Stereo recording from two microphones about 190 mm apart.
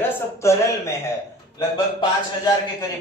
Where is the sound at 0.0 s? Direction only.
15° left (ahead or behind).